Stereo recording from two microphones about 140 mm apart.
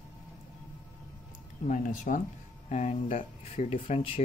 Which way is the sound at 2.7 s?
55° left (ahead or behind).